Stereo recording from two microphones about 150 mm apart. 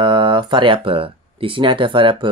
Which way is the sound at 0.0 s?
35° right (ahead or behind).